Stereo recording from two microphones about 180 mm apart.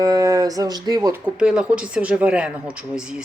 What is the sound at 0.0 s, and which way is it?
Speech, 20° right (ahead or behind).